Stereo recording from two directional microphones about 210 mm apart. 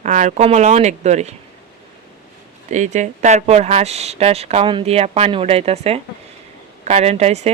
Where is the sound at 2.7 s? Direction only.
35° right (ahead or behind).